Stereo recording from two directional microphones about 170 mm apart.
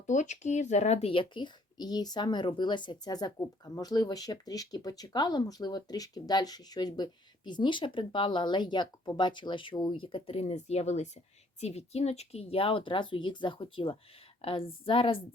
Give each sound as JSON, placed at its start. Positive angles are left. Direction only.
{"t": 0.1, "sound": "speech", "side_deg": 45}